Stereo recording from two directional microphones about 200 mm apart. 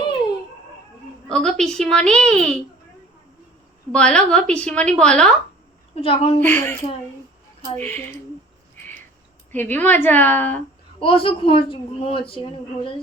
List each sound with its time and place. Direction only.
1.3 s a woman's voice: 5° left (ahead or behind)
3.9 s a woman's voice: 5° left (ahead or behind)
6.0 s a woman's voice: 25° left (ahead or behind)
6.4 s a woman's voice: 10° left (ahead or behind)
7.8 s a woman's voice: 10° left (ahead or behind)
9.5 s a woman's voice: 10° left (ahead or behind)
11.0 s a woman's voice: 25° left (ahead or behind)